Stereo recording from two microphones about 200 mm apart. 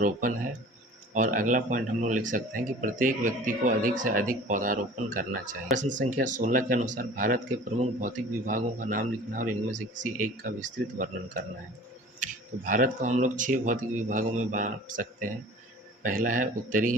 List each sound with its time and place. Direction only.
0.0 s speech: 40° right (ahead or behind)
12.2 s speech: 40° right (ahead or behind)